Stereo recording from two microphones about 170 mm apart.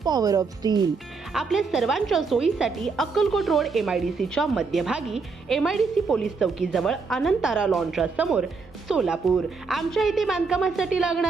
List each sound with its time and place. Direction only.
0.0 s speech: 20° right (ahead or behind)
1.3 s a woman's voice: centre (ahead or behind)